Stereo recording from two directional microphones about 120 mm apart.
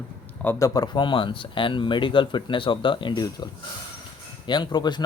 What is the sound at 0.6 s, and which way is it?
Speech, 30° left (ahead or behind).